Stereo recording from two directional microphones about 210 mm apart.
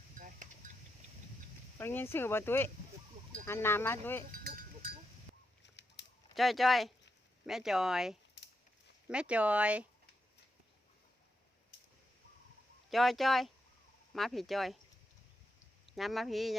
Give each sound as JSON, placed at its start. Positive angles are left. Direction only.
{"t": 0.1, "sound": "a sound", "side_deg": -40}
{"t": 1.8, "sound": "speech", "side_deg": 10}
{"t": 5.6, "sound": "fowl", "side_deg": 55}
{"t": 6.3, "sound": "speech", "side_deg": 0}
{"t": 12.9, "sound": "speech", "side_deg": 0}
{"t": 15.9, "sound": "speech", "side_deg": 0}